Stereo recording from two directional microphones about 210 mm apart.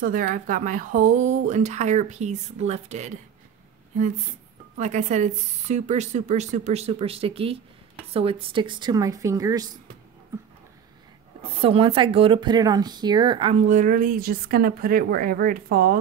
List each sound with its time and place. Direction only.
0.0 s speech: 40° right (ahead or behind)
4.7 s speech: 35° right (ahead or behind); by 9.7 s 15° right (ahead or behind)
11.6 s speech: 25° right (ahead or behind); by 16.0 s 45° right (ahead or behind)